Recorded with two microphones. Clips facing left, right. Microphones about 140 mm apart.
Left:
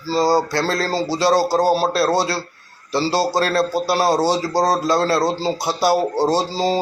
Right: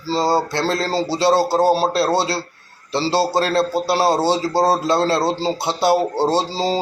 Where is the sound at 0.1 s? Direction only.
25° right (ahead or behind).